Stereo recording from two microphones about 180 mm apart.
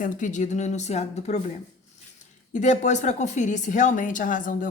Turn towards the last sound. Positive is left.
turn(degrees=45)  # may be behind; listen again after turning